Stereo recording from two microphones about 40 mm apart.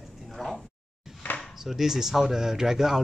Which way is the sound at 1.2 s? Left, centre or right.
Left.